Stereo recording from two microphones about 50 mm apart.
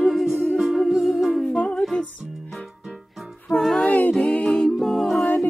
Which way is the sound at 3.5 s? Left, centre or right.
Centre.